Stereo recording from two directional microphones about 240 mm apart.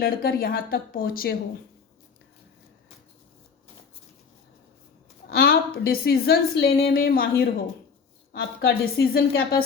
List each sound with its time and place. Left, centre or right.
0.0 s a woman's voice: left
5.3 s a woman's voice: left